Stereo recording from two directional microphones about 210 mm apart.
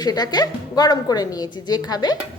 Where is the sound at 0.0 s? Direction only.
20° left (ahead or behind).